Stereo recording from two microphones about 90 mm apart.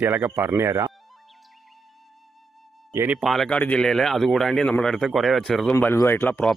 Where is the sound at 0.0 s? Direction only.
20° right (ahead or behind).